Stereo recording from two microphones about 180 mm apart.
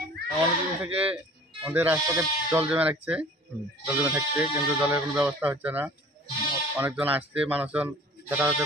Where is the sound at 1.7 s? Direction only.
10° right (ahead or behind).